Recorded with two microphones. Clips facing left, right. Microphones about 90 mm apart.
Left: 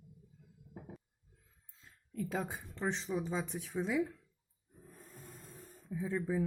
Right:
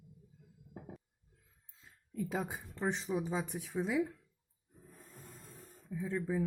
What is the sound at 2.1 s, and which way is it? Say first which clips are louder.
Speech: even; 5° right (ahead or behind).